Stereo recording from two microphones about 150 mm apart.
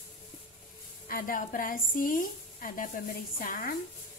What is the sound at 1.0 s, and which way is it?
A woman's voice, 70° left (ahead or behind).